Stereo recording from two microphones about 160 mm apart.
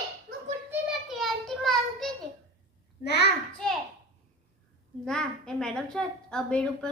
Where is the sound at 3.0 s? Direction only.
90° left.